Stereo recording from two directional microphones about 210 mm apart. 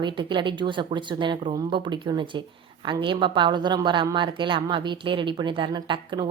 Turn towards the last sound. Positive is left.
turn(degrees=-20)  # may be behind; listen again after turning